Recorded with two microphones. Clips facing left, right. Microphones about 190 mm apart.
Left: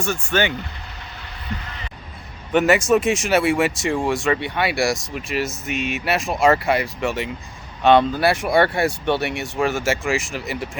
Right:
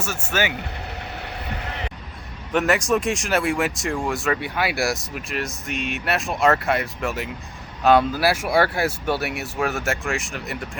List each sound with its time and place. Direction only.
0.0 s speech: 5° right (ahead or behind)
1.1 s vehicle: 65° right (ahead or behind)
2.5 s speech: centre (ahead or behind)